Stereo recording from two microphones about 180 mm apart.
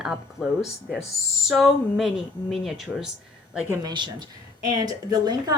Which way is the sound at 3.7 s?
20° right (ahead or behind).